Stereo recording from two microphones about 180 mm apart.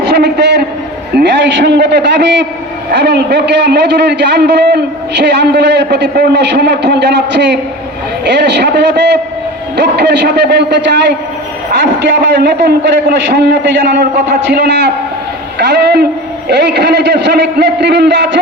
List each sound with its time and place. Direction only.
0.0 s a sound: 70° right (ahead or behind)
1.1 s a man's voice: 75° right (ahead or behind)
11.8 s a man's voice: 85° right